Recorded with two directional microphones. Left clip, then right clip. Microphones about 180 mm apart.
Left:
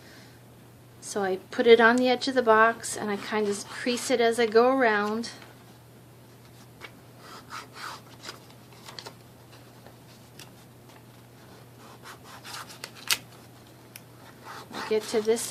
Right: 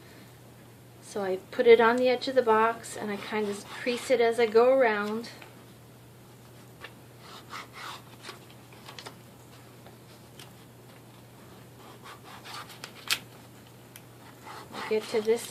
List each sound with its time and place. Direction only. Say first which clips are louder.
1.1 s a woman's voice: left 2 dB; 40° left (ahead or behind)
14.5 s dog: left 2 dB; 10° left (ahead or behind)
14.8 s speech: left 2 dB; 40° left (ahead or behind)